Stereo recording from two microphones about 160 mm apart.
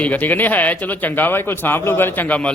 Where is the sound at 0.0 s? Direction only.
10° left (ahead or behind).